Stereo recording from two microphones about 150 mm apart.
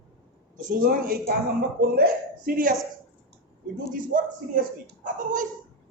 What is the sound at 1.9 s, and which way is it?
Speech, 85° right.